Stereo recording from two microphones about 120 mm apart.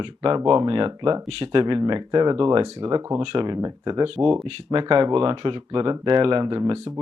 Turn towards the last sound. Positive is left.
turn(degrees=-35)  # may be behind; listen again after turning